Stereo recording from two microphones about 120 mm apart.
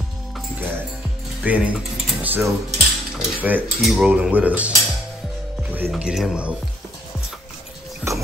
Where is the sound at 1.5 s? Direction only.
10° right (ahead or behind).